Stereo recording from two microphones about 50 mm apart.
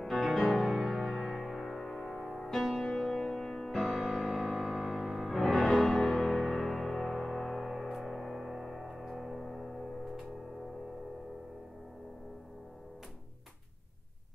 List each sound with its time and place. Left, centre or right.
0.0 s music: centre